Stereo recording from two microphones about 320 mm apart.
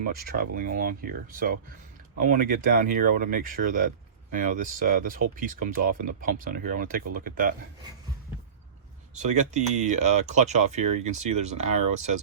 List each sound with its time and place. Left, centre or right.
0.0 s speech: right
9.1 s speech: right